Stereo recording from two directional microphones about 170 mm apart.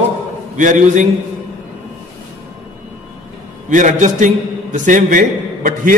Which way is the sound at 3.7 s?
50° right (ahead or behind).